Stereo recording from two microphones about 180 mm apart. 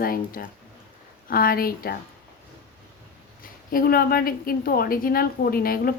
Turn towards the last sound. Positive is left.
turn(degrees=55)  # may be behind; listen again after turning